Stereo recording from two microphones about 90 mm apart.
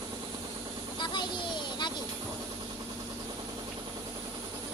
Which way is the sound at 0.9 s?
55° left (ahead or behind).